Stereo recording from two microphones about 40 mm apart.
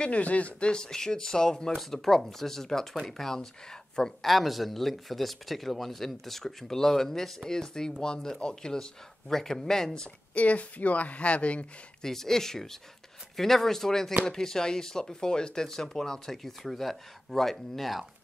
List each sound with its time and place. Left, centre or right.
0.0 s speech: left
0.7 s speech: centre
1.8 s speech: centre
10.3 s speech: left
12.0 s speech: centre